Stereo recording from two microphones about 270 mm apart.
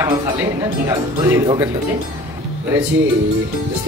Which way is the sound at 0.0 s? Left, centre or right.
Centre.